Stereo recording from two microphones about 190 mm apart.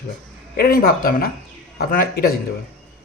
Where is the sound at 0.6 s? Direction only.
50° left (ahead or behind).